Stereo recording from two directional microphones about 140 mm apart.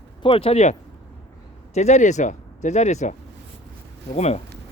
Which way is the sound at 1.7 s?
55° left (ahead or behind).